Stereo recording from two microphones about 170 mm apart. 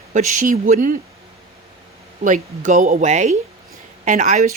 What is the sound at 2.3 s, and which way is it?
Speech, 45° right (ahead or behind).